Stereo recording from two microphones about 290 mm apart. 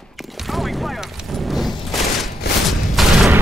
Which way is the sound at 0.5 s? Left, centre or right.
Centre.